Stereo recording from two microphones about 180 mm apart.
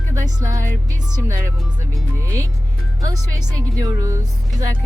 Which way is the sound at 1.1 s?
15° right (ahead or behind).